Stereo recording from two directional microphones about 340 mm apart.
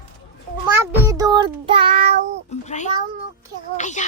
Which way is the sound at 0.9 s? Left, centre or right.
Centre.